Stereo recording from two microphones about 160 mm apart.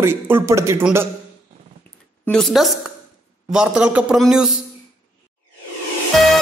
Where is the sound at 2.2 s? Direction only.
5° left (ahead or behind).